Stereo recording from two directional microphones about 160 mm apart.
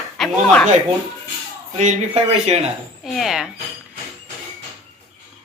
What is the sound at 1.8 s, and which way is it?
Speech, 45° right (ahead or behind).